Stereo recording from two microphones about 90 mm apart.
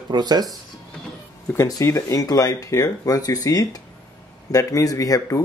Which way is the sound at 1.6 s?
35° left (ahead or behind).